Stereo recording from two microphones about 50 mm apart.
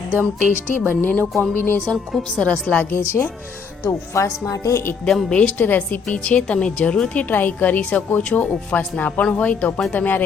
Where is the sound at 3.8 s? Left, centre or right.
Left.